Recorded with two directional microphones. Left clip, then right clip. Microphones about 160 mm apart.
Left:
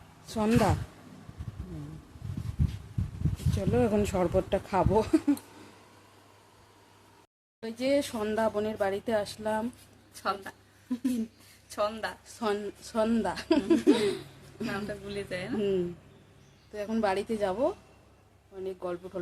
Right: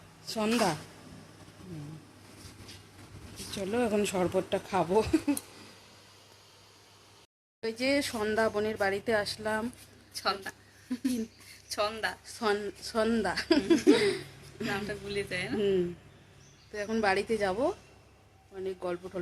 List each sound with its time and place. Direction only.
0.3 s speech: 20° left (ahead or behind)
3.5 s speech: 15° left (ahead or behind)
7.6 s a woman's voice: 5° right (ahead or behind)
10.2 s speech: 10° left (ahead or behind)
11.7 s speech: 15° left (ahead or behind)
12.2 s a woman's voice: centre (ahead or behind)
14.8 s speech: 10° left (ahead or behind)
15.5 s a woman's voice: centre (ahead or behind)